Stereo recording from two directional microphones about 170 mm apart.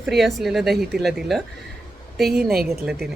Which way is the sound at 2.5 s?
65° right (ahead or behind).